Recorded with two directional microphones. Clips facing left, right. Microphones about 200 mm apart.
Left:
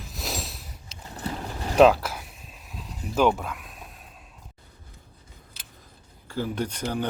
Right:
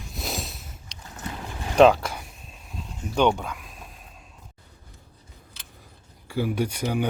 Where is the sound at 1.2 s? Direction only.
35° left (ahead or behind).